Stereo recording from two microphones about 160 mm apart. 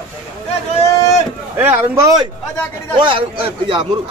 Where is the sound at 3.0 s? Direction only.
30° right (ahead or behind).